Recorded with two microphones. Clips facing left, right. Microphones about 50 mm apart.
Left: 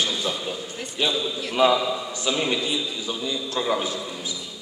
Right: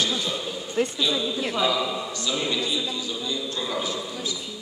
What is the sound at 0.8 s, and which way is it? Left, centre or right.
Speech, right.